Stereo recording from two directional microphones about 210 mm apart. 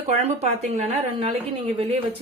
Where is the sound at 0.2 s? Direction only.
30° right (ahead or behind).